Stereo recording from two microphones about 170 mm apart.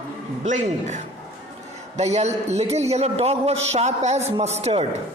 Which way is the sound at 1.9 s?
40° right (ahead or behind).